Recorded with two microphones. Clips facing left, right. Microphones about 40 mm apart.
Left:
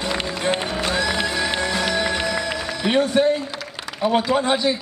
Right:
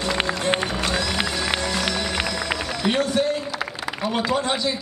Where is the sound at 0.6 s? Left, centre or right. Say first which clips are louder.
Left 2 dB; centre.